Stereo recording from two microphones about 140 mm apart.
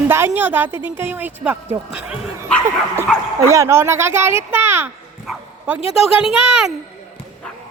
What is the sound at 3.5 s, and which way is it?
Speech, 20° right (ahead or behind).